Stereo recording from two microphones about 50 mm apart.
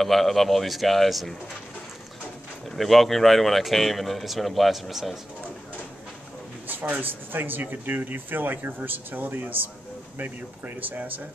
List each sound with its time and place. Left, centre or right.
0.0 s speech: centre
2.7 s speech: centre
6.7 s speech: right